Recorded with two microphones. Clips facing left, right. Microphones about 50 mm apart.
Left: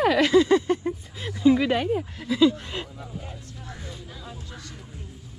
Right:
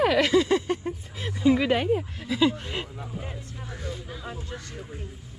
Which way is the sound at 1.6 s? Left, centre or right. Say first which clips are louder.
Even; right.